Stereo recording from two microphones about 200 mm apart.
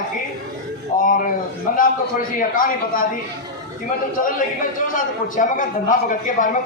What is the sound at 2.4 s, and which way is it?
Speech, 45° left (ahead or behind).